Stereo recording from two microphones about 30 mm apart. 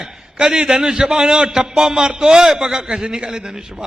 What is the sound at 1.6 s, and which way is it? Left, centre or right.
A man's voice, centre.